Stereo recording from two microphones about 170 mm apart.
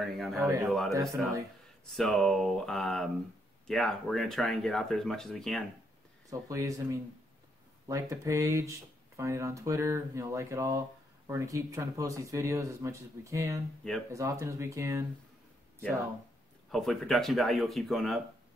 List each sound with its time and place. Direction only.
0.0 s speech: centre (ahead or behind)
0.4 s speech: 20° right (ahead or behind)
0.7 s speech: centre (ahead or behind)
6.3 s speech: 20° right (ahead or behind)
16.7 s speech: centre (ahead or behind)